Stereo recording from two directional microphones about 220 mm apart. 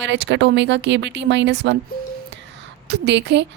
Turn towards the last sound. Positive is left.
turn(degrees=-55)  # may be behind; listen again after turning